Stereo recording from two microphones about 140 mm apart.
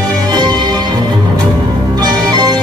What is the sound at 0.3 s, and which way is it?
Music, 30° right (ahead or behind).